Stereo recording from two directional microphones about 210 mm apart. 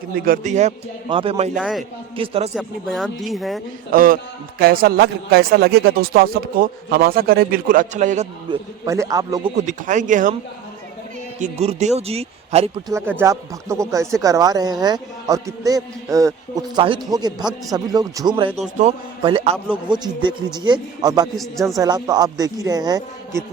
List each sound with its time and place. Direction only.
0.3 s speech: 35° right (ahead or behind)
1.5 s speech: 5° right (ahead or behind)
2.1 s speech: 25° right (ahead or behind)
2.6 s speech: centre (ahead or behind)
3.9 s a man's voice: 40° right (ahead or behind)
8.4 s speech: 15° right (ahead or behind)
9.6 s speech: 35° right (ahead or behind)
11.3 s speech: 35° right (ahead or behind)
12.9 s speech: 10° right (ahead or behind)
21.3 s speech: centre (ahead or behind)
21.8 s speech: 20° right (ahead or behind)